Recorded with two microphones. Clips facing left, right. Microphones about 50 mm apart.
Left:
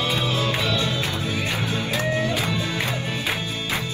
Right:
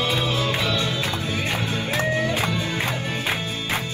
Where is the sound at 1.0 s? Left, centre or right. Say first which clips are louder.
Even; right.